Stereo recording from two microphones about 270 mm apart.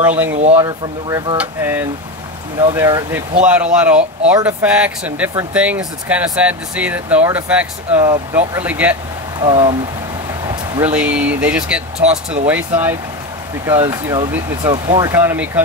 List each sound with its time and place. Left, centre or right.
0.0 s speech: centre
0.4 s speech: right
0.7 s speech: centre
9.4 s speech: centre
10.4 s a sound: centre
10.9 s speech: centre